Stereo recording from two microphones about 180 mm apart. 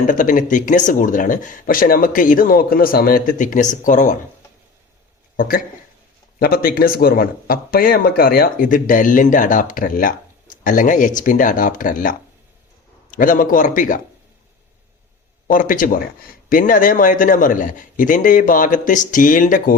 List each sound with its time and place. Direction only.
0.1 s speech: 45° left (ahead or behind)
5.4 s speech: 50° left (ahead or behind)
15.4 s speech: 50° left (ahead or behind)